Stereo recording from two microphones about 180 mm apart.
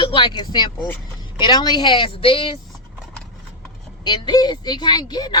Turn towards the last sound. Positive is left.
turn(degrees=25)  # may be behind; listen again after turning